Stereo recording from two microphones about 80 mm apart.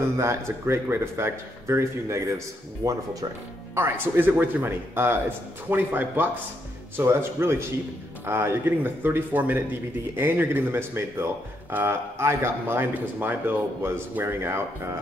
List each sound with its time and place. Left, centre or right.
0.0 s speech: right
3.7 s a man's voice: right